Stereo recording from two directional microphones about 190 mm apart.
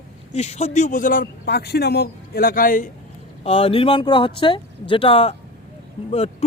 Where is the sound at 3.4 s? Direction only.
30° left (ahead or behind).